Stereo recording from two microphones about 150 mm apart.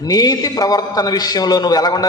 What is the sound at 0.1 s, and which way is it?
A man's voice, 25° left (ahead or behind).